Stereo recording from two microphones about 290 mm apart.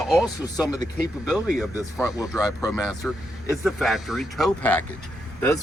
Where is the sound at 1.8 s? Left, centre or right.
Centre.